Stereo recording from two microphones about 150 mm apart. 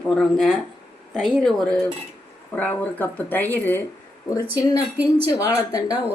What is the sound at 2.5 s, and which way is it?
A woman's voice, 10° left (ahead or behind).